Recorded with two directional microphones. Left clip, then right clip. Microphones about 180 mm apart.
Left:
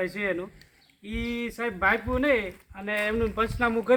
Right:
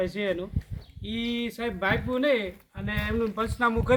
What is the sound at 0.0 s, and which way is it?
Speech, 30° left (ahead or behind).